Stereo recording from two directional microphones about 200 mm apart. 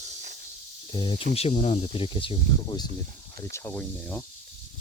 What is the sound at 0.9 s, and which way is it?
Speech, 25° left (ahead or behind).